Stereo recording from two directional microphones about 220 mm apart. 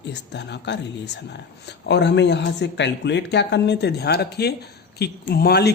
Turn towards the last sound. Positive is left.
turn(degrees=45)  # may be behind; listen again after turning